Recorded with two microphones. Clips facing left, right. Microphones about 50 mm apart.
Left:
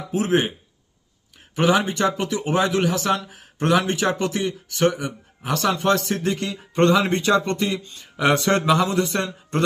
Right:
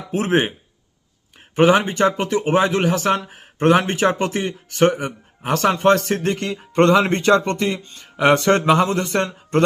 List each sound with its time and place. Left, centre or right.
0.1 s speech: right